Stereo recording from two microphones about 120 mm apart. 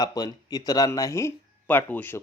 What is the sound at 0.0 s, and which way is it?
Speech, 35° left (ahead or behind).